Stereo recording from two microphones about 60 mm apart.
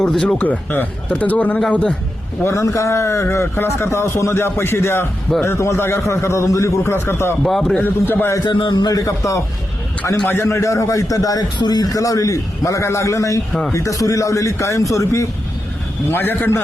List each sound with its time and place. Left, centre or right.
0.0 s a man's voice: centre
0.3 s a man's voice: left
2.5 s a man's voice: left
6.9 s a man's voice: left
7.4 s a man's voice: centre
7.8 s a man's voice: left
8.9 s a man's voice: left
10.2 s a man's voice: left
16.1 s a man's voice: left